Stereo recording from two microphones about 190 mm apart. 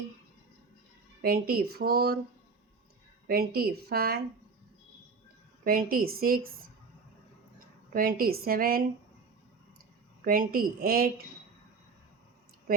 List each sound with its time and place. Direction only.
1.2 s speech: 50° right (ahead or behind)
3.2 s speech: 50° right (ahead or behind)
5.6 s speech: 50° right (ahead or behind)
7.9 s speech: 50° right (ahead or behind)
10.2 s speech: 50° right (ahead or behind)